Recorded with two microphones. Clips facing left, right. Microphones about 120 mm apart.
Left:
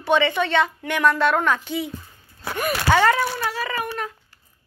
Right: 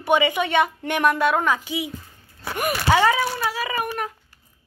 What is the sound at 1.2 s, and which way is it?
A woman's voice, 10° right (ahead or behind).